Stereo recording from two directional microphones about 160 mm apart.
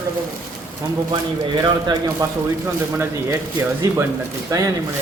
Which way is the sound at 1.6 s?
25° right (ahead or behind).